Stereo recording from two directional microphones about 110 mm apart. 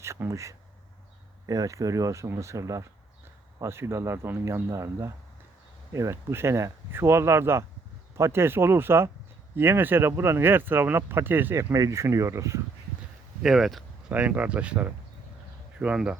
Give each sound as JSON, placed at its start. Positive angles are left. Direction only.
{"t": 0.0, "sound": "speech", "side_deg": -25}
{"t": 11.7, "sound": "speech", "side_deg": -30}
{"t": 13.4, "sound": "speech", "side_deg": 0}
{"t": 14.1, "sound": "speech", "side_deg": -15}